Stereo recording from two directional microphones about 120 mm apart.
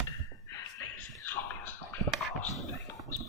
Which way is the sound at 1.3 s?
15° left (ahead or behind).